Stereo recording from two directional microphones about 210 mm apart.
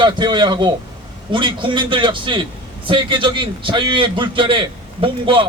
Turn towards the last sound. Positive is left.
turn(degrees=-25)  # may be behind; listen again after turning